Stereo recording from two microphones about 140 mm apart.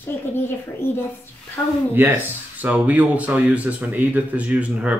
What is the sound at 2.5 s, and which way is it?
Speech, 10° right (ahead or behind).